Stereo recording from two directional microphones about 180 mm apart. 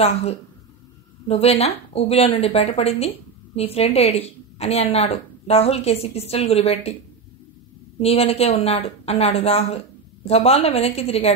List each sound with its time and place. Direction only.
0.0 s a woman's voice: 35° left (ahead or behind)
8.0 s a woman's voice: 35° left (ahead or behind)